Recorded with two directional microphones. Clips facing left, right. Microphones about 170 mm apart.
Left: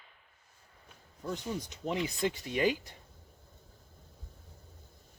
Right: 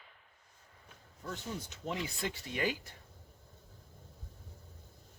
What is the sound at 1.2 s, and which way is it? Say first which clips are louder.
Speech: left 5 dB; 15° left (ahead or behind).